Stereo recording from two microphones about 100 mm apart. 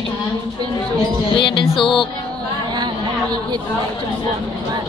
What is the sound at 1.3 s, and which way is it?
Speech, 50° left (ahead or behind).